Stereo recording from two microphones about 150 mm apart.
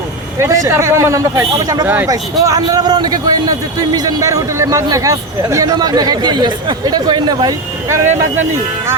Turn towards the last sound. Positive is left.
turn(degrees=-25)  # may be behind; listen again after turning